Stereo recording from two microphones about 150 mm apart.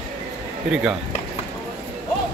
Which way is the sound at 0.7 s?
5° right (ahead or behind).